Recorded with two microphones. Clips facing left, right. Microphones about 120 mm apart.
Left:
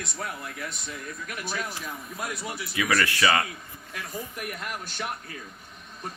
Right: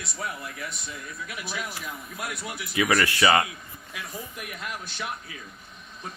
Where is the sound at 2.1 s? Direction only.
30° left (ahead or behind).